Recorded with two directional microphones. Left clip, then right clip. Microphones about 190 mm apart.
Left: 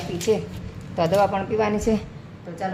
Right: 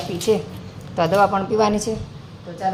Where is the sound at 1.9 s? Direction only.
35° left (ahead or behind).